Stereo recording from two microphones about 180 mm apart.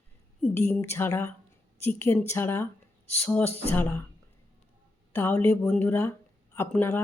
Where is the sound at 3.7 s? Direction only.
10° left (ahead or behind).